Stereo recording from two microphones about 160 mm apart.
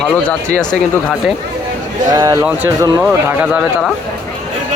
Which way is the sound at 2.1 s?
20° right (ahead or behind).